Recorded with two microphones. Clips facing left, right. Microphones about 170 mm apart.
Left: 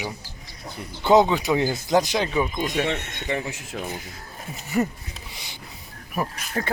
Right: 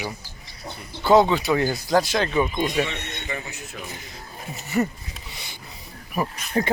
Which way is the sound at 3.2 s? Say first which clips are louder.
Left 5 dB; 80° left.